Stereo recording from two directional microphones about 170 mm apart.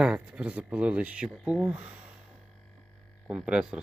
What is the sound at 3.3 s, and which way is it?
Speech, 5° right (ahead or behind).